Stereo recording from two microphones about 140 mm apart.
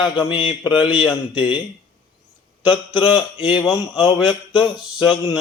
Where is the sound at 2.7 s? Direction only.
35° left (ahead or behind).